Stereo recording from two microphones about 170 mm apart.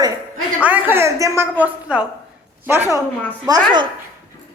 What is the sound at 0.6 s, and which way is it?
A woman's voice, 10° right (ahead or behind).